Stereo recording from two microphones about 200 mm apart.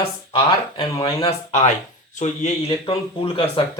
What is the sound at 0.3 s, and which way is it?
Speech, 20° left (ahead or behind).